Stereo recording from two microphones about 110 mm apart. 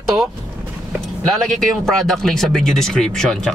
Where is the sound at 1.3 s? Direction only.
5° left (ahead or behind).